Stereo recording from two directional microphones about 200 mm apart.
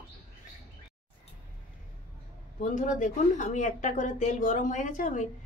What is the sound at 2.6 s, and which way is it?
Speech, 40° left (ahead or behind).